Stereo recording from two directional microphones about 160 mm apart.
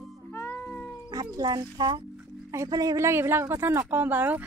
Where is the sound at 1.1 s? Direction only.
25° right (ahead or behind).